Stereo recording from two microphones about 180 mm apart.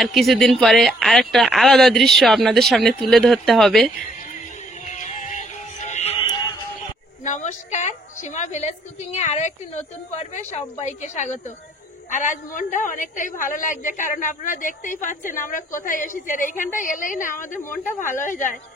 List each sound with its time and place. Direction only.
0.0 s speech: centre (ahead or behind)
4.9 s music: 45° left (ahead or behind)
7.2 s a woman's voice: 40° left (ahead or behind)